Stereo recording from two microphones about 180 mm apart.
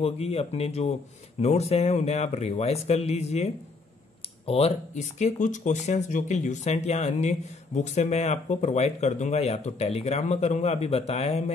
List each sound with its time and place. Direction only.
0.0 s speech: 35° left (ahead or behind)